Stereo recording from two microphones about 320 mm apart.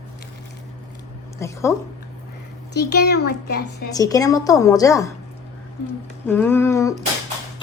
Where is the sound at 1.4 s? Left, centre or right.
Centre.